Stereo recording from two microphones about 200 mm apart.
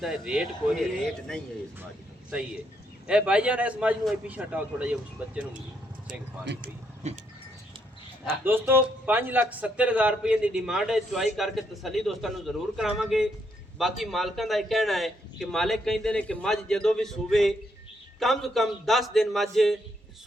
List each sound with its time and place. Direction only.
0.0 s a man's voice: centre (ahead or behind)
3.1 s a man's voice: 5° right (ahead or behind)
7.0 s a sound: 35° right (ahead or behind)
8.3 s a man's voice: 10° right (ahead or behind)